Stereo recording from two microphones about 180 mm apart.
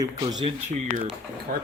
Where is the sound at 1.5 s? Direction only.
55° right (ahead or behind).